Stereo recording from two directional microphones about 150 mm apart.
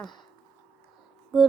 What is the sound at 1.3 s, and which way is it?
Music, centre (ahead or behind).